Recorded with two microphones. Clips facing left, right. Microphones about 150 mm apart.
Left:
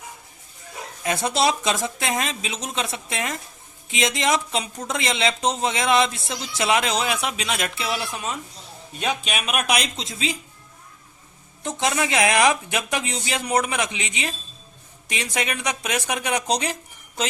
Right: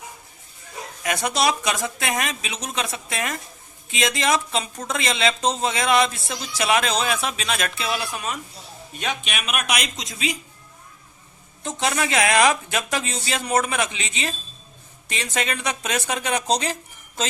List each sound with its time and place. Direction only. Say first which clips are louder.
1.0 s a man's voice: left 1 dB; 25° left (ahead or behind)
9.2 s a man's voice: left 3 dB; 35° left (ahead or behind)
11.8 s speech: even; 20° left (ahead or behind)